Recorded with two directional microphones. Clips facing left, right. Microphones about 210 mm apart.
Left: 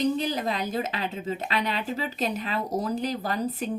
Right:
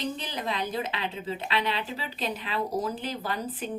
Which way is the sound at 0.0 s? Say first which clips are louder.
Left 7 dB; 40° left (ahead or behind).